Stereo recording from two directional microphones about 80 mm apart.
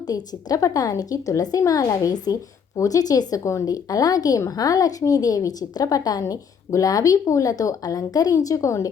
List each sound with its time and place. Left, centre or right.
0.1 s a woman's voice: left